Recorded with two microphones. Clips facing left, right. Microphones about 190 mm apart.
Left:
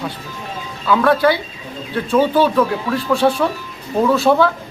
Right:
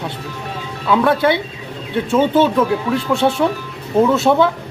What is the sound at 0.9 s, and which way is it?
A man's voice, 25° right (ahead or behind).